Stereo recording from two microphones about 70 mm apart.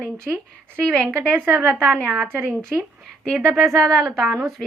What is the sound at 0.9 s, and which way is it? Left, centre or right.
Speech, centre.